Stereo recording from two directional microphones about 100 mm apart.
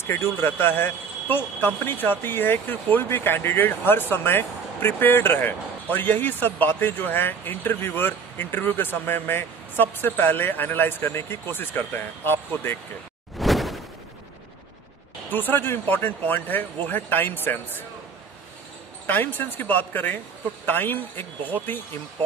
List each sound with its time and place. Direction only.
0.0 s speech: 25° left (ahead or behind)
13.4 s a sound: centre (ahead or behind)
15.2 s speech: 20° left (ahead or behind)
19.0 s speech: 20° left (ahead or behind)